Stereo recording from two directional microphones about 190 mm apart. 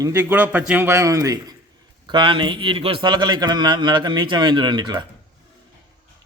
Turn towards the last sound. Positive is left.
turn(degrees=-20)  # may be behind; listen again after turning